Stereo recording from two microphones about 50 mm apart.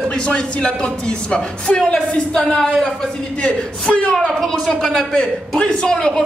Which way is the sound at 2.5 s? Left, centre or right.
Centre.